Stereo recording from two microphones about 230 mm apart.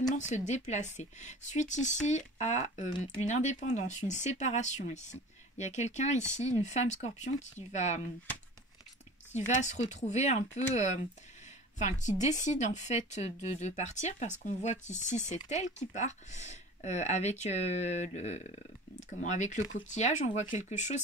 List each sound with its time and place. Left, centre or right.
0.1 s speech: left
9.5 s speech: left